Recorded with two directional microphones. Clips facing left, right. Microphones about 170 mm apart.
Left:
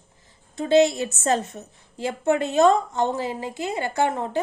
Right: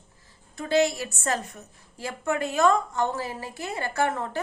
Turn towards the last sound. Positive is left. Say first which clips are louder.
# left 3 dB
turn(degrees=20)  # may be behind; listen again after turning